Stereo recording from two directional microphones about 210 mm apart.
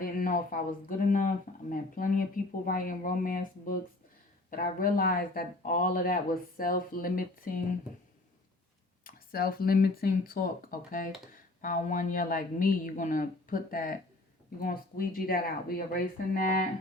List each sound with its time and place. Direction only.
0.0 s speech: 40° left (ahead or behind)
9.0 s speech: 45° left (ahead or behind)